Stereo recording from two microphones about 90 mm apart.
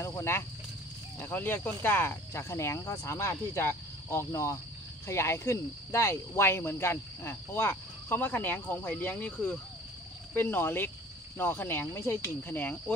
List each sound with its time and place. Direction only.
0.0 s cricket: 30° left (ahead or behind)